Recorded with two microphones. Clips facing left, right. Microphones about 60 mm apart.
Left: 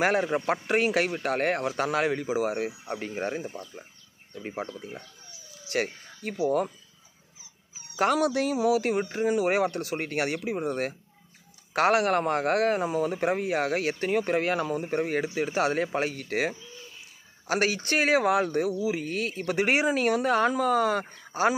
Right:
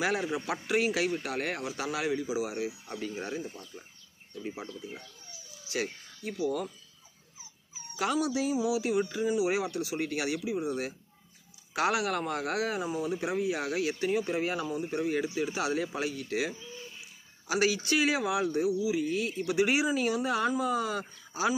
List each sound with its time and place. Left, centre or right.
0.0 s speech: left
8.0 s speech: left